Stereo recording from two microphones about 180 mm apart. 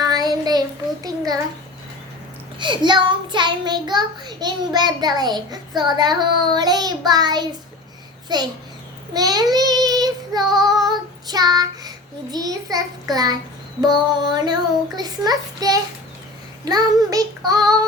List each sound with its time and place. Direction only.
0.0 s child singing: 20° right (ahead or behind)
1.0 s a sound: 20° right (ahead or behind)
2.6 s a child's voice: 25° right (ahead or behind)
9.1 s child singing: 20° right (ahead or behind)
13.8 s a child's voice: 25° right (ahead or behind)